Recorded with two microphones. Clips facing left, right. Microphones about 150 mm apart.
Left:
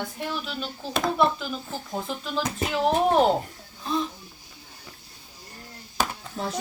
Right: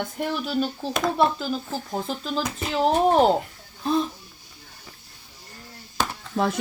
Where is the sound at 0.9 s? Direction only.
5° left (ahead or behind).